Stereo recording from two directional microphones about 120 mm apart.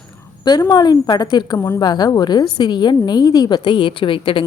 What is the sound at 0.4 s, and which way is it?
A woman's voice, 35° left (ahead or behind).